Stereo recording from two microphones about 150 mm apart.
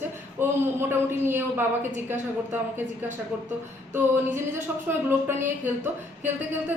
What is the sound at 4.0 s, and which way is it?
A man's voice, 15° right (ahead or behind).